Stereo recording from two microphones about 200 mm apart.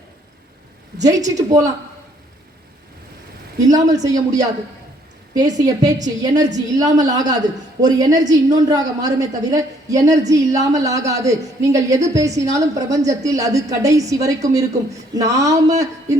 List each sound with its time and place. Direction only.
1.1 s a woman's voice: 15° right (ahead or behind)
3.6 s a woman's voice: 20° right (ahead or behind)